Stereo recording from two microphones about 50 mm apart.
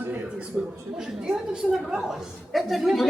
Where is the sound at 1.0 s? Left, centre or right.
Centre.